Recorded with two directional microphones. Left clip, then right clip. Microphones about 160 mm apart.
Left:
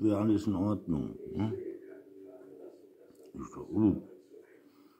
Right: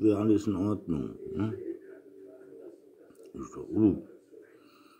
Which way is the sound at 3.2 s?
5° left (ahead or behind).